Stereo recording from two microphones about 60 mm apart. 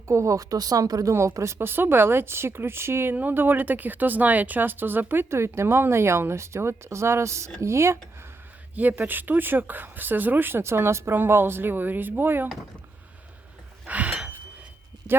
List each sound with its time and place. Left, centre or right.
0.1 s speech: right
1.3 s speech: right
1.5 s speech: right
3.2 s speech: right
8.7 s speech: right
13.8 s a sound: right